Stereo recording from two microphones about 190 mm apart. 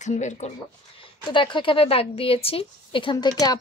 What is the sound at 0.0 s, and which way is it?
Speech, 40° left (ahead or behind).